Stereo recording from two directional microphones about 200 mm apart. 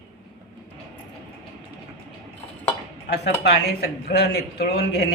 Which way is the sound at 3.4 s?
55° left (ahead or behind).